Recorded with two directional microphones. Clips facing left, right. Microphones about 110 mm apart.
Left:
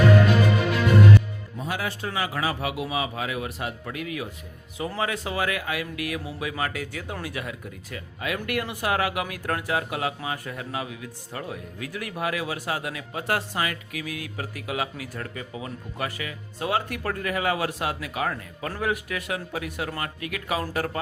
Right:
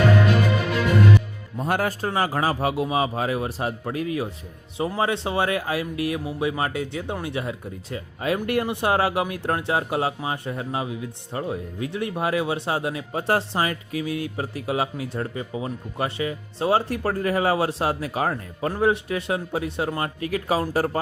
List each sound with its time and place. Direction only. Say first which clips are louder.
1.5 s a man's voice: right 7 dB; 50° right (ahead or behind); by 21.0 s 30° right (ahead or behind)